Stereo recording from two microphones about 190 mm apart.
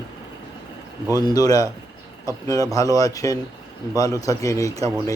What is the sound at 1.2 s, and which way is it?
Speech, 20° left (ahead or behind).